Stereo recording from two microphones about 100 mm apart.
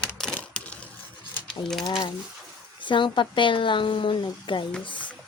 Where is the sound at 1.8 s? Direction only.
60° left (ahead or behind).